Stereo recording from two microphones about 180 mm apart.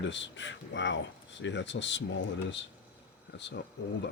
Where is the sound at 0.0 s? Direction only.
90° left.